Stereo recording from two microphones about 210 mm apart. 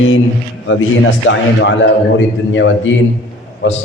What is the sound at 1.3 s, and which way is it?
A man's voice, 60° left (ahead or behind).